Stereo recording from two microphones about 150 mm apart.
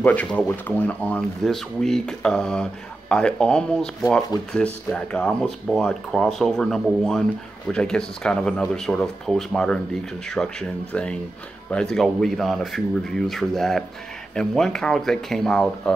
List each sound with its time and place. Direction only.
0.0 s speech: 10° left (ahead or behind)